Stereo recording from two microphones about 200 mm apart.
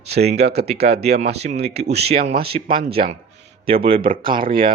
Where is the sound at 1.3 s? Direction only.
30° right (ahead or behind).